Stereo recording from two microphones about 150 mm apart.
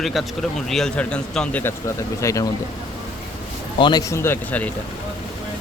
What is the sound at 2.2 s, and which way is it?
Speech, 20° left (ahead or behind).